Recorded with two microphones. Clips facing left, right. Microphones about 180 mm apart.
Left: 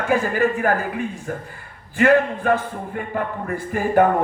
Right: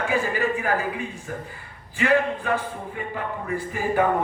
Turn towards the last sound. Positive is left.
turn(degrees=50)  # may be behind; listen again after turning